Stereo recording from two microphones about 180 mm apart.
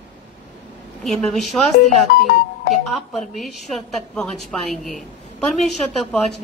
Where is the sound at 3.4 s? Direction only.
Centre (ahead or behind).